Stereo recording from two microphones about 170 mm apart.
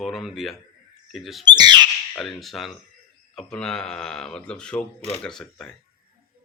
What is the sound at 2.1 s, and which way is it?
Speech, centre (ahead or behind).